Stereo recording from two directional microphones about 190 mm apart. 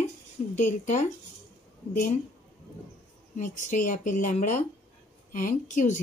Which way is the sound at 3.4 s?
45° left (ahead or behind).